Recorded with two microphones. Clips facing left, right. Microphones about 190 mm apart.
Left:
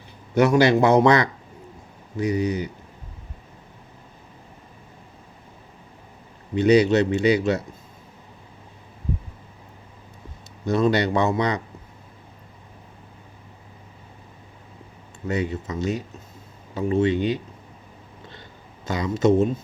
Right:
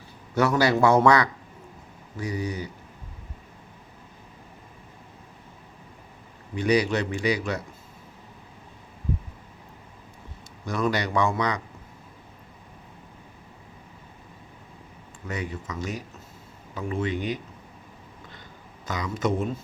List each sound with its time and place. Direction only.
0.3 s a man's voice: 20° left (ahead or behind)
6.6 s a man's voice: 25° left (ahead or behind)
10.7 s a man's voice: 25° left (ahead or behind)
15.3 s a man's voice: 25° left (ahead or behind)
18.9 s a man's voice: 25° left (ahead or behind)